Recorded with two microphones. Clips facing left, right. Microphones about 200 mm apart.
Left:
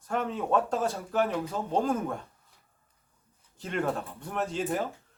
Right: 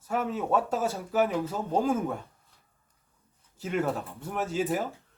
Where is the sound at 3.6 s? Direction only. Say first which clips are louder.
Right 1 dB; 5° right (ahead or behind).